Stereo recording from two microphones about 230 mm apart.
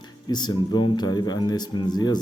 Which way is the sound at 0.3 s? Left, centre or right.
Centre.